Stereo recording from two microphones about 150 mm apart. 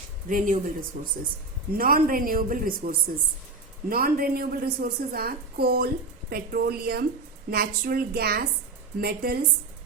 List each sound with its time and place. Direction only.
0.3 s speech: 65° right (ahead or behind)
1.7 s a woman's voice: 75° right (ahead or behind); by 9.4 s 90° right